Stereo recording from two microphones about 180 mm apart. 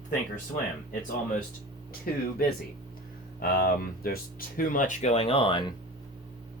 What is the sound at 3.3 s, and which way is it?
Speech, 55° left (ahead or behind).